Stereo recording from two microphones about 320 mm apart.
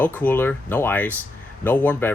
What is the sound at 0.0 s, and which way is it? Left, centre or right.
Speech, centre.